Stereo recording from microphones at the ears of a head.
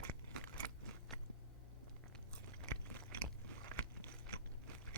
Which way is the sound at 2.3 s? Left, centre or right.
Right.